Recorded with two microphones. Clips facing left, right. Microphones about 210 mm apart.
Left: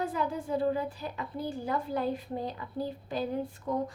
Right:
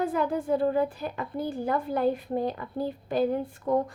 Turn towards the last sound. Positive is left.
turn(degrees=-55)  # may be behind; listen again after turning